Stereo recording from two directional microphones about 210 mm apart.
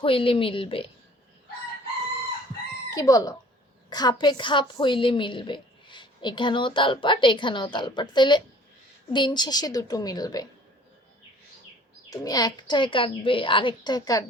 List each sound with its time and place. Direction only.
0.0 s a woman's voice: 25° left (ahead or behind)
2.9 s a woman's voice: 15° left (ahead or behind)
12.1 s a woman's voice: 15° left (ahead or behind)